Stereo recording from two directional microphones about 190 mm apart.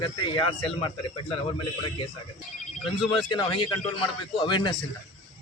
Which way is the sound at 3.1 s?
25° left (ahead or behind).